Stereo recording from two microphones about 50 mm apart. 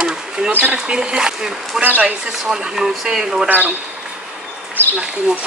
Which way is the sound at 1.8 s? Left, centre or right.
Right.